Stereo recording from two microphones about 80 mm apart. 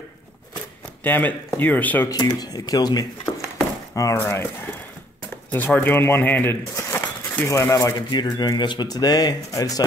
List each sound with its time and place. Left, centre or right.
1.0 s speech: left
2.0 s speech: left
3.9 s speech: left
5.5 s speech: left
7.4 s speech: left
8.2 s speech: left